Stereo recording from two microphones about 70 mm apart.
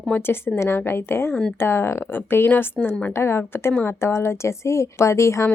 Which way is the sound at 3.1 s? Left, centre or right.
Left.